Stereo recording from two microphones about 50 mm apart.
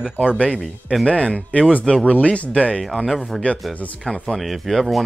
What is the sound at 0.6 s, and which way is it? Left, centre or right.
Speech, centre.